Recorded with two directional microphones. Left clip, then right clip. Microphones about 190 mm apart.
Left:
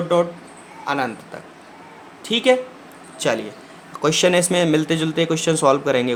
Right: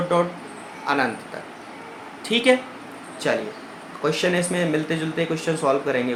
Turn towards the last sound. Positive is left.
turn(degrees=40)  # may be behind; listen again after turning